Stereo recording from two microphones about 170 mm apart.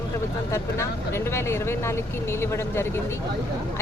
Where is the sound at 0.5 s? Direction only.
15° left (ahead or behind).